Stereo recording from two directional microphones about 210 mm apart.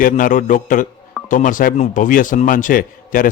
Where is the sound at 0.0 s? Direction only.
40° left (ahead or behind).